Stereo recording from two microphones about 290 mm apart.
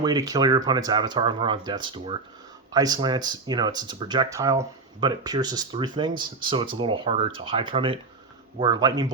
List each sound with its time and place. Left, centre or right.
0.0 s speech: centre